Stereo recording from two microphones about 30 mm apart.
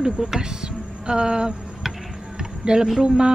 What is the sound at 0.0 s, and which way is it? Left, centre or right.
Speech, centre.